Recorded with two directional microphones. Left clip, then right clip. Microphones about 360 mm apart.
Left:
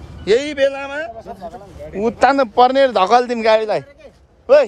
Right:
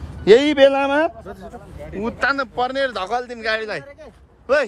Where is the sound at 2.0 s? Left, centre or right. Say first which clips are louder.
Left 7 dB; centre.